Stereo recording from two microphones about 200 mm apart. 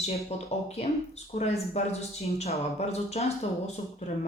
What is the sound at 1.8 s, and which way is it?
Speech, 30° left (ahead or behind).